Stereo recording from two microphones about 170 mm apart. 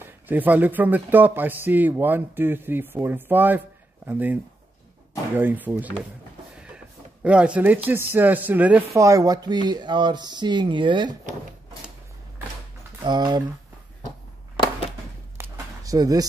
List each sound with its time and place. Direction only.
0.0 s speech: 10° right (ahead or behind)
7.2 s speech: 5° right (ahead or behind); by 11.1 s 30° right (ahead or behind)
13.0 s speech: 25° right (ahead or behind)
15.3 s a sound: 15° right (ahead or behind)